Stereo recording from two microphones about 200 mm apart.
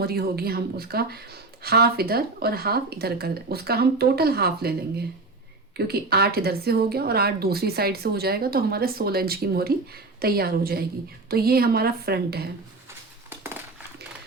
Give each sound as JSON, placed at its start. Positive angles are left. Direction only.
{"t": 0.0, "sound": "speech", "side_deg": -50}
{"t": 5.7, "sound": "speech", "side_deg": -55}
{"t": 13.3, "sound": "a sound", "side_deg": -10}